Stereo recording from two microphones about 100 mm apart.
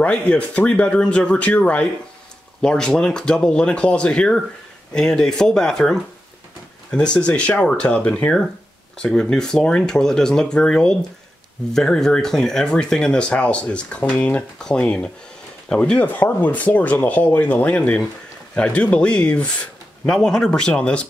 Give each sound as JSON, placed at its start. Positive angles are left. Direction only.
{"t": 0.0, "sound": "speech", "side_deg": 10}